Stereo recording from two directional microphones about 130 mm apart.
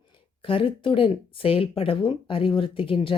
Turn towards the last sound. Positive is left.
turn(degrees=45)  # may be behind; listen again after turning